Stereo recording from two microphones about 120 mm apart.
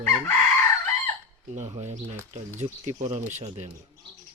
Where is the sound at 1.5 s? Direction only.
75° right (ahead or behind).